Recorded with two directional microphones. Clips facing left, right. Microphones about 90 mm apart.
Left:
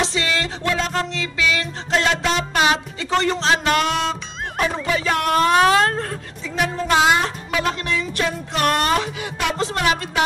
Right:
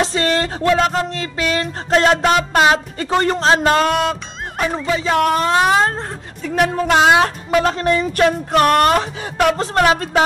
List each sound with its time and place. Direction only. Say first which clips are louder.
0.0 s speech: right 5 dB; 40° right (ahead or behind)
4.9 s speech: right 4 dB; 25° right (ahead or behind)
6.4 s a woman's voice: right 6 dB; 55° right (ahead or behind)
7.5 s speech: right 7 dB; 35° right (ahead or behind)